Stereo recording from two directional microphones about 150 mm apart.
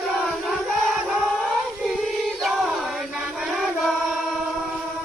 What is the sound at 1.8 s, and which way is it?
Chant, 5° right (ahead or behind).